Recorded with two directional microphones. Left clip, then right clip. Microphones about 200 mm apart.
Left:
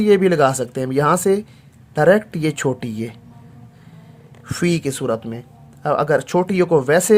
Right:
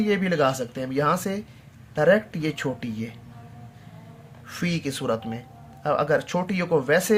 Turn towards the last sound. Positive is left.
turn(degrees=45)  # may be behind; listen again after turning